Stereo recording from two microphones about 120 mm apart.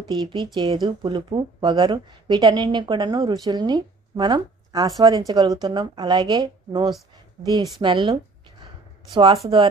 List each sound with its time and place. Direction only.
0.0 s speech: 40° right (ahead or behind)
7.8 s speech: 50° right (ahead or behind)